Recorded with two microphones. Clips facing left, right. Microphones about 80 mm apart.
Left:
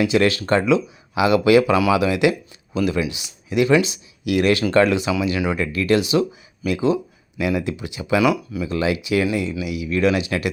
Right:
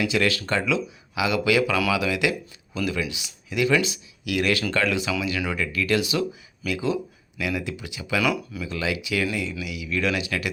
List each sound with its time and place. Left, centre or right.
0.0 s speech: left
8.7 s speech: left